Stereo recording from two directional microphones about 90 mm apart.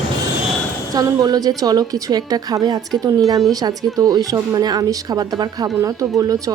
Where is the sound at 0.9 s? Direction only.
45° right (ahead or behind).